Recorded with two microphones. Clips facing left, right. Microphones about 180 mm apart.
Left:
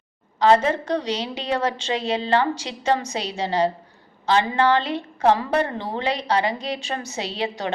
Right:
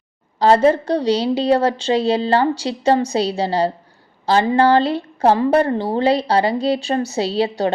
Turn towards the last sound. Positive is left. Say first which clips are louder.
# right 8 dB
turn(degrees=-35)  # may be behind; listen again after turning